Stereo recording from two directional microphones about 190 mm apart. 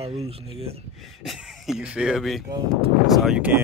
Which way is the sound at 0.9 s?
Centre (ahead or behind).